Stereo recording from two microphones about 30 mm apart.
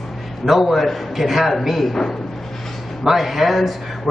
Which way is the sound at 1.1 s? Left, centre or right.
Centre.